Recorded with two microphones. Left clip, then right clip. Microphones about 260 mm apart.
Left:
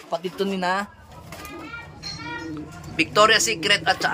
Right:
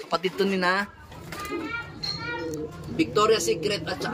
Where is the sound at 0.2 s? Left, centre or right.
Centre.